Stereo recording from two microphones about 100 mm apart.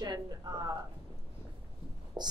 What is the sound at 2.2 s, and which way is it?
Speech, 45° right (ahead or behind).